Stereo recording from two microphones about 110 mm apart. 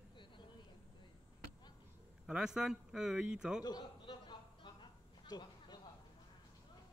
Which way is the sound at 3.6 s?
40° left (ahead or behind).